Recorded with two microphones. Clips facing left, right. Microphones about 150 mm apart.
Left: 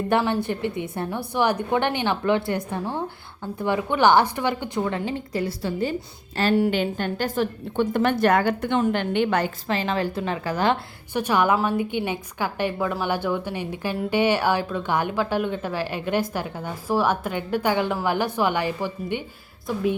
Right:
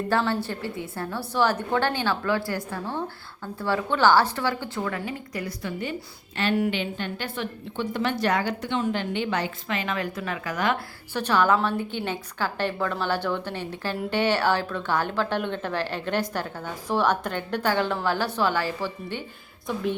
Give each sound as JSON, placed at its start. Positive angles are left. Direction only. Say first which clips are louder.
{"t": 0.1, "sound": "a woman's voice", "louder": "left 3 dB", "side_deg": 20}
{"t": 6.7, "sound": "a woman's voice", "louder": "left 5 dB", "side_deg": 45}
{"t": 9.6, "sound": "a woman's voice", "louder": "left 4 dB", "side_deg": 30}
{"t": 11.1, "sound": "a woman's voice", "louder": "left 1 dB", "side_deg": 15}
{"t": 19.6, "sound": "speech", "louder": "left 3 dB", "side_deg": 5}